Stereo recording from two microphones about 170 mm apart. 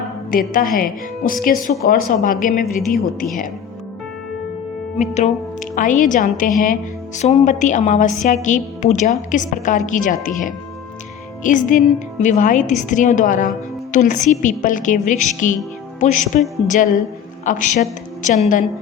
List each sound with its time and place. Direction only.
0.3 s a woman's voice: 55° left (ahead or behind)
4.9 s a woman's voice: 45° left (ahead or behind)